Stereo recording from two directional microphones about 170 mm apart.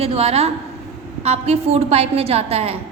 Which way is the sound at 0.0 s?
35° right (ahead or behind).